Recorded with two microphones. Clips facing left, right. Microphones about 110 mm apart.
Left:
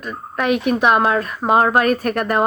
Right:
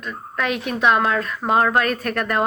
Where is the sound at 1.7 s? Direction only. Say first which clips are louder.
Left 4 dB; 10° left (ahead or behind).